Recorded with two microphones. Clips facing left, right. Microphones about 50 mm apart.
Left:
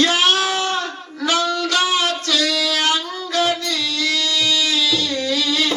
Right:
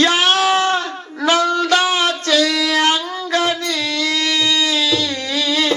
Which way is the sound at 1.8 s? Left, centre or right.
Right.